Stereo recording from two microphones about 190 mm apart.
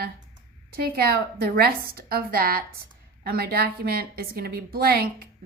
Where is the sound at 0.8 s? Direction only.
55° right (ahead or behind).